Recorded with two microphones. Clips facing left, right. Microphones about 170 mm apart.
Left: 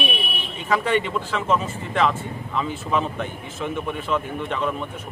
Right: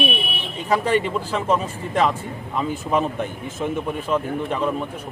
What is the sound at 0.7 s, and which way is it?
Speech, 35° right (ahead or behind).